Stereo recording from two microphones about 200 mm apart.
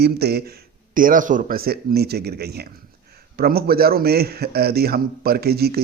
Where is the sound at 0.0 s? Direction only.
55° right (ahead or behind).